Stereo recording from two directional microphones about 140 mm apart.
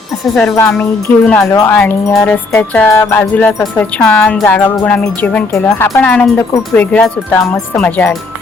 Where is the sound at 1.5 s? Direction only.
25° left (ahead or behind).